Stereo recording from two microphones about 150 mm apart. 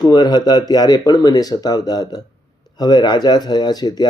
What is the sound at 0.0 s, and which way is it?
Speech, 25° left (ahead or behind).